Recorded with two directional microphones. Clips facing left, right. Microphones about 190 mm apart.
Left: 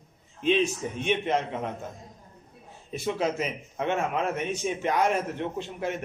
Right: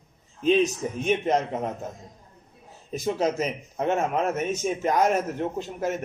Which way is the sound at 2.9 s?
40° right (ahead or behind).